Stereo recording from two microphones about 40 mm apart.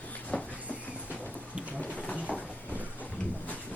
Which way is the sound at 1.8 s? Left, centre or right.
Left.